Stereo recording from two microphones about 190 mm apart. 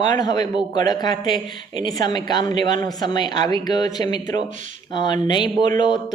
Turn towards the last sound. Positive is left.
turn(degrees=25)  # may be behind; listen again after turning